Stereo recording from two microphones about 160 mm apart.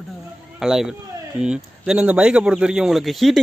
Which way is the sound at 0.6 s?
5° right (ahead or behind).